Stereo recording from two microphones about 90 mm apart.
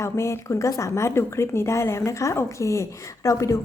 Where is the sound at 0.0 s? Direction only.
30° left (ahead or behind).